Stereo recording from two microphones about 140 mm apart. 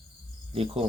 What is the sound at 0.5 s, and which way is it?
Speech, 45° right (ahead or behind).